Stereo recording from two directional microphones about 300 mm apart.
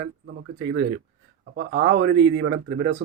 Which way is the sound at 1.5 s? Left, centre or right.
Right.